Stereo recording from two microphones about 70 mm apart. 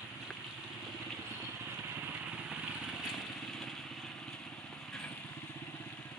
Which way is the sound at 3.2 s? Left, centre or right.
Centre.